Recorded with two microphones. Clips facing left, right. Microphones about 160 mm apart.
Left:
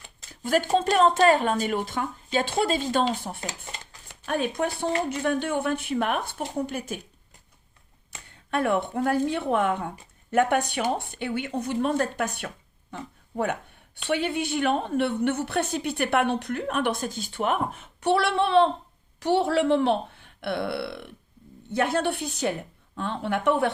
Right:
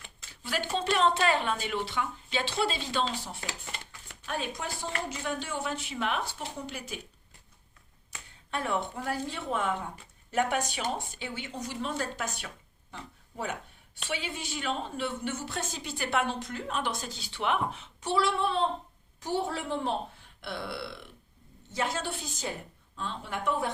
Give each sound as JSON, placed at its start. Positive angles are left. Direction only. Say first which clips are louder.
{"t": 0.4, "sound": "a woman's voice", "louder": "left 8 dB", "side_deg": 45}
{"t": 8.4, "sound": "a woman's voice", "louder": "left 7 dB", "side_deg": 60}
{"t": 12.9, "sound": "a sound", "louder": "left 8 dB", "side_deg": 55}
{"t": 14.1, "sound": "a woman's voice", "louder": "left 10 dB", "side_deg": 60}